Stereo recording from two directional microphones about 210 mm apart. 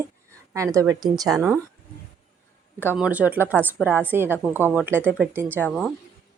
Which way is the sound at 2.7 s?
5° right (ahead or behind).